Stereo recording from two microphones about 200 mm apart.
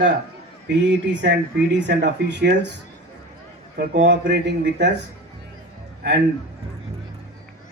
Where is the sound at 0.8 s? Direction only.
60° right (ahead or behind).